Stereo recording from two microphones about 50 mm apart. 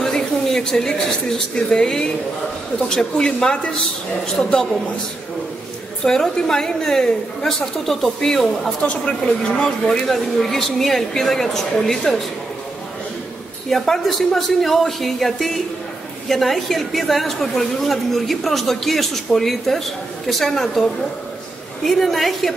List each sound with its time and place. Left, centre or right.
0.0 s a sound: centre
1.5 s a woman's voice: centre
6.0 s a woman's voice: centre
8.8 s a woman's voice: left
9.8 s a woman's voice: centre
13.7 s a woman's voice: centre
21.8 s a woman's voice: centre